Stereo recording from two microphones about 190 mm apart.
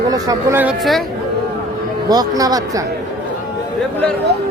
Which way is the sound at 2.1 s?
20° right (ahead or behind).